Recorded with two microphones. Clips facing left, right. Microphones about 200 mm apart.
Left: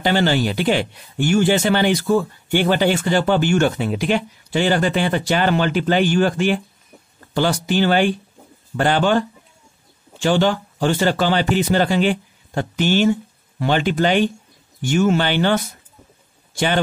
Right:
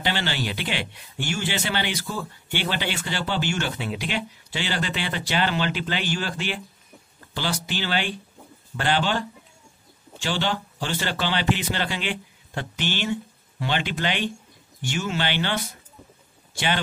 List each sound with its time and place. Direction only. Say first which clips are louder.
0.0 s speech: left 10 dB; 45° left (ahead or behind)
10.2 s a man's voice: left 9 dB; 50° left (ahead or behind)